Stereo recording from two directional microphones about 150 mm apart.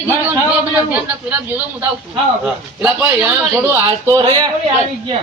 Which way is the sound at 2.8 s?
10° right (ahead or behind).